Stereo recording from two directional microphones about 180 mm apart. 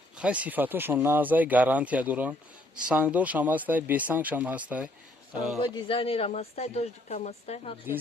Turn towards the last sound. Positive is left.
turn(degrees=35)  # may be behind; listen again after turning